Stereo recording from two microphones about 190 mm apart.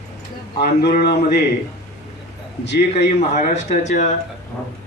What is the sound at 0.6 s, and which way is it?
Speech, 60° left (ahead or behind).